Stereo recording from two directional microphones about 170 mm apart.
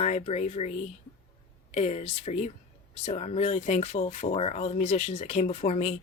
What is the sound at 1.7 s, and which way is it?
Speech, 40° left (ahead or behind).